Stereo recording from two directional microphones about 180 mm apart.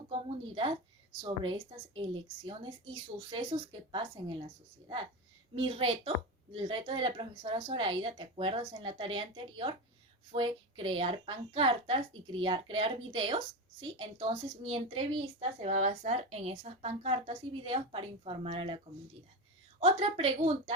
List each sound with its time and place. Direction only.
0.1 s a woman's voice: 30° right (ahead or behind)
5.5 s a woman's voice: 30° right (ahead or behind)
19.8 s a woman's voice: 30° right (ahead or behind)